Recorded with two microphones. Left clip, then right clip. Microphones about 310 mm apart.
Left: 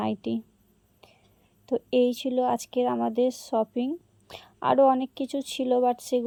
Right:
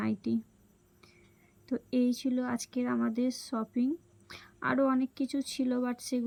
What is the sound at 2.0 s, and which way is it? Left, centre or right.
Speech, centre.